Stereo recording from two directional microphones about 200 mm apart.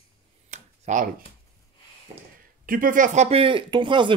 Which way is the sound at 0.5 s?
40° right (ahead or behind).